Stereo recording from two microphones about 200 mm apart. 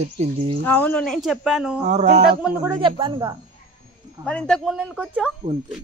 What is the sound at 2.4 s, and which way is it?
Speech, 10° right (ahead or behind).